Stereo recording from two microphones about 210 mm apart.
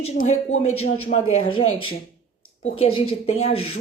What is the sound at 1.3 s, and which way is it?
Speech, 85° left.